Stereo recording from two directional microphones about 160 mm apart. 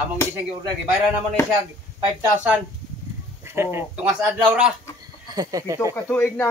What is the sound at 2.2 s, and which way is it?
Speech, 10° right (ahead or behind).